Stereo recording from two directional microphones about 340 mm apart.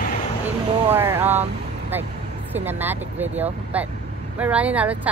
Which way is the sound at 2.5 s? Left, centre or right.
Centre.